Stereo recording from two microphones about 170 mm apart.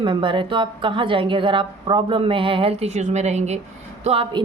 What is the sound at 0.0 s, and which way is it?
A woman's voice, 30° right (ahead or behind).